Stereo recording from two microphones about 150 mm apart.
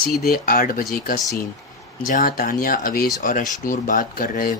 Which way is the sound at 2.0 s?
70° left (ahead or behind).